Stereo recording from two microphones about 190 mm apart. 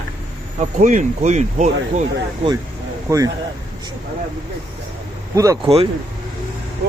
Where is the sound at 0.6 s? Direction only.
40° right (ahead or behind).